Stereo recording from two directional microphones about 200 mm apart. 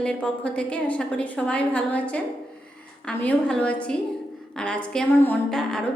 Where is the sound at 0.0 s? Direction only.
5° left (ahead or behind).